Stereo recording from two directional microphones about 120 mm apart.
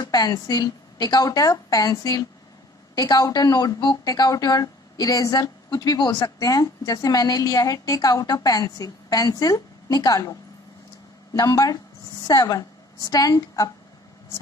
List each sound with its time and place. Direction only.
0.0 s speech: 30° left (ahead or behind)
11.3 s a woman's voice: 30° left (ahead or behind)